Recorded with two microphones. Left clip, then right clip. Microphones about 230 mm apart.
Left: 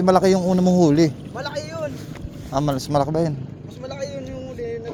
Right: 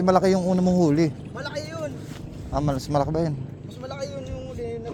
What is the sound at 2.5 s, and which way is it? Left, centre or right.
Speech, centre.